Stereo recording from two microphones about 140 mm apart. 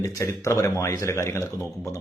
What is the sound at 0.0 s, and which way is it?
A man's voice, 25° left (ahead or behind).